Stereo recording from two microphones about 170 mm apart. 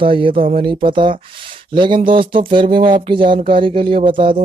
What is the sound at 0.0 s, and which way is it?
Speech, 30° right (ahead or behind).